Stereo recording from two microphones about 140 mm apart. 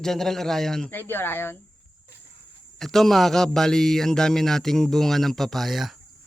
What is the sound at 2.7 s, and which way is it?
Speech, centre (ahead or behind).